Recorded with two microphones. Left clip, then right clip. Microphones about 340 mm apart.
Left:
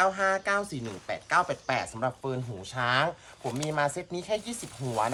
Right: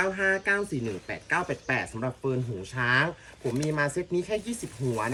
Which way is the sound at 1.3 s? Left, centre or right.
Centre.